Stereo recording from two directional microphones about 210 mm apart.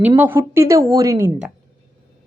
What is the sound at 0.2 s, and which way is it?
Speech, 10° right (ahead or behind).